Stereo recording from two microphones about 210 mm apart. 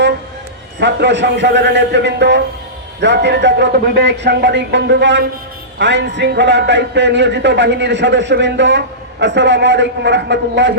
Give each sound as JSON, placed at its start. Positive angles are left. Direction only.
{"t": 0.8, "sound": "speech", "side_deg": -55}